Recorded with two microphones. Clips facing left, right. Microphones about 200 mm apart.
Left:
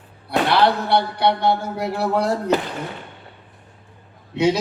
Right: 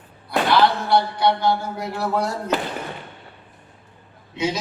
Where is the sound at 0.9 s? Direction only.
65° left (ahead or behind).